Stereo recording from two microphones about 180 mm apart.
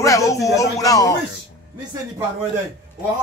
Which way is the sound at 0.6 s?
20° left (ahead or behind).